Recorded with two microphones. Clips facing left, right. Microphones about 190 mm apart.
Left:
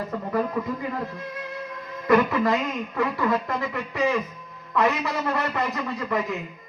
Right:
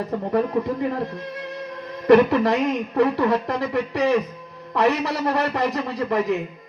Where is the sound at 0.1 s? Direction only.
30° right (ahead or behind).